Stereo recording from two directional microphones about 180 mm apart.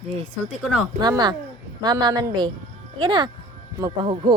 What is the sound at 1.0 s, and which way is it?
Speech, 25° right (ahead or behind).